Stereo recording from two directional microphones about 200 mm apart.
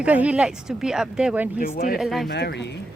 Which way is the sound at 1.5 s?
45° left (ahead or behind).